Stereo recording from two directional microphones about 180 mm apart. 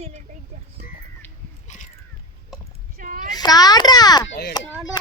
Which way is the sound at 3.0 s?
50° right (ahead or behind).